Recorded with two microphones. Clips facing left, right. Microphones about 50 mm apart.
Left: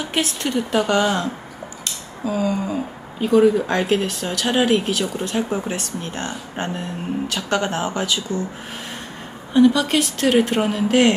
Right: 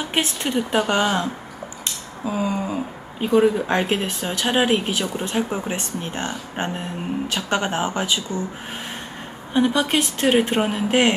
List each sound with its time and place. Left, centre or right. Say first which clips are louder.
0.0 s a woman's voice: left 1 dB; right
9.5 s speech: left 4 dB; right